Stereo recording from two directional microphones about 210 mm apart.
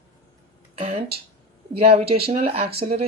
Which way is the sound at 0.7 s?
30° right (ahead or behind).